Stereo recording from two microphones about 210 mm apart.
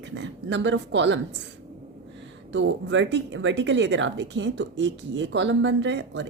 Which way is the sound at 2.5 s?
60° right (ahead or behind).